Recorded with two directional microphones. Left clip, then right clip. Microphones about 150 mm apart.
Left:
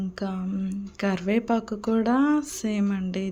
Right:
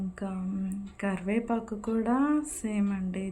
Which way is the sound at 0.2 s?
40° left (ahead or behind).